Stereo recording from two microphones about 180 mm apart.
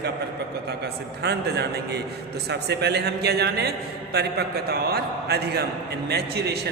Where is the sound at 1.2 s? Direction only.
65° right (ahead or behind).